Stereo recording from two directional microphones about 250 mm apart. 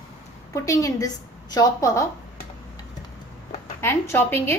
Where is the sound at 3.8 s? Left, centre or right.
Centre.